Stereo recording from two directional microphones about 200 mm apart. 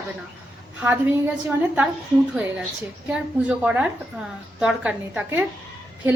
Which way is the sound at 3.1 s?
5° right (ahead or behind).